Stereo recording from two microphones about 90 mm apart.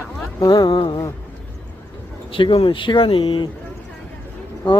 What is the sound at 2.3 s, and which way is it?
Speech, 80° left.